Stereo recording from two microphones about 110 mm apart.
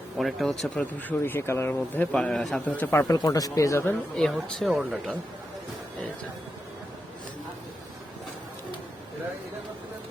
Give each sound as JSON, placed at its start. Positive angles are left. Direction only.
{"t": 0.2, "sound": "speech", "side_deg": 0}
{"t": 0.9, "sound": "speech", "side_deg": 20}
{"t": 2.1, "sound": "speech", "side_deg": 5}
{"t": 2.7, "sound": "speech", "side_deg": 20}
{"t": 3.2, "sound": "speech", "side_deg": 35}
{"t": 4.1, "sound": "speech", "side_deg": 5}